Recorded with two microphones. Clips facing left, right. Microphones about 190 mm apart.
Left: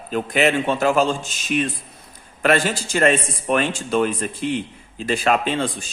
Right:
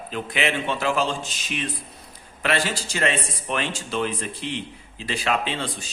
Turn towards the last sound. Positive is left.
turn(degrees=45)  # may be behind; listen again after turning